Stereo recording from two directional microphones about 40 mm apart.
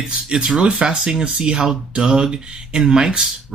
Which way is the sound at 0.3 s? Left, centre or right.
Centre.